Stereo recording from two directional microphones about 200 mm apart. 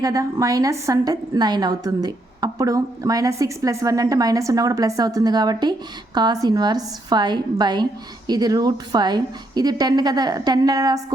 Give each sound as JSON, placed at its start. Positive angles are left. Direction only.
{"t": 0.0, "sound": "a woman's voice", "side_deg": -15}